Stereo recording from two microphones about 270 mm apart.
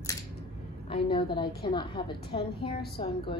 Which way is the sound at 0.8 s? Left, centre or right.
Centre.